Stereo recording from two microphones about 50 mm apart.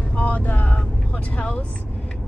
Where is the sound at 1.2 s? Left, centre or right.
Left.